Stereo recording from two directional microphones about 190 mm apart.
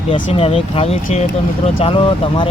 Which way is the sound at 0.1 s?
30° left (ahead or behind).